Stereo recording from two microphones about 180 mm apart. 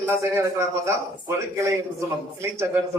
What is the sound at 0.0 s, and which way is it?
A man's voice, 15° right (ahead or behind).